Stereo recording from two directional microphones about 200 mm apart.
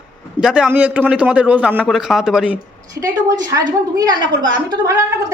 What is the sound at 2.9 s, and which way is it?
A woman's voice, 15° right (ahead or behind).